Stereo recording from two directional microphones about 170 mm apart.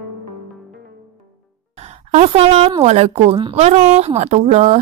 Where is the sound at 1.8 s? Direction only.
40° right (ahead or behind).